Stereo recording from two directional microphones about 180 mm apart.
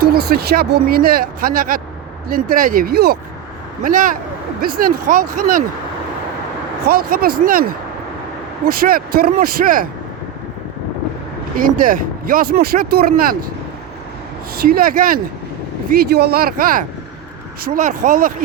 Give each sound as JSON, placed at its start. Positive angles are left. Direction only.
{"t": 0.0, "sound": "speech", "side_deg": -60}
{"t": 3.8, "sound": "speech", "side_deg": -50}
{"t": 6.8, "sound": "speech", "side_deg": -55}
{"t": 11.5, "sound": "speech", "side_deg": -50}
{"t": 14.5, "sound": "speech", "side_deg": -60}